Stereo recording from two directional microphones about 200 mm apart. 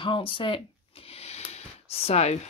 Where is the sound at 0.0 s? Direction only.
25° left (ahead or behind).